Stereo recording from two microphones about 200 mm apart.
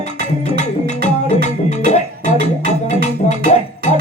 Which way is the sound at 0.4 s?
35° left (ahead or behind).